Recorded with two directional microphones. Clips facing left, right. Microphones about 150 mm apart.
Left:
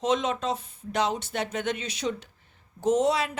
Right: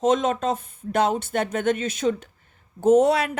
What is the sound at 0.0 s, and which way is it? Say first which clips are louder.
Speech: right 5 dB; 50° right (ahead or behind).